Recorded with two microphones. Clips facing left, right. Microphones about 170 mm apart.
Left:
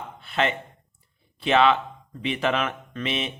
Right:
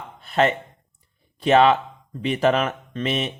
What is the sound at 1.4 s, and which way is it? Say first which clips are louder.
A man's voice: right 4 dB; 40° right (ahead or behind).